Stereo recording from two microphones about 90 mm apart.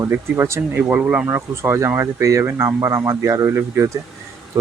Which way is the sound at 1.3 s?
30° right (ahead or behind).